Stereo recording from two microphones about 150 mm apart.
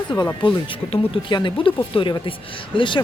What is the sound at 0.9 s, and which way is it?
Speech, 30° left (ahead or behind).